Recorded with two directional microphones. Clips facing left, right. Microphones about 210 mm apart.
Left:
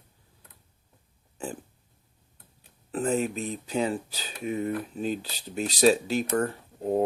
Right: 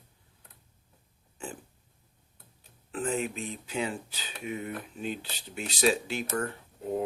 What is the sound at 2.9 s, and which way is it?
Speech, 40° left (ahead or behind).